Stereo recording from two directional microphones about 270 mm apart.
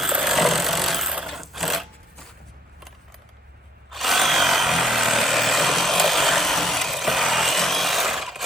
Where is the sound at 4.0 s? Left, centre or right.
Centre.